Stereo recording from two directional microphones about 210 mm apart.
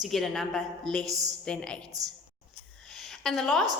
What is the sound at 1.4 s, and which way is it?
Speech, 5° left (ahead or behind).